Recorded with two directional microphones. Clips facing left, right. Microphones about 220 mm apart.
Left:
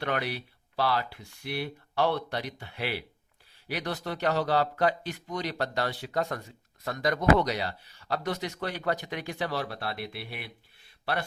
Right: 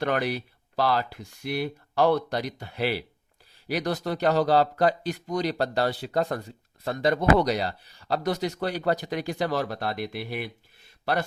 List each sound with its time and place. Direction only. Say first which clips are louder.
0.0 s speech: right 5 dB; 45° right (ahead or behind)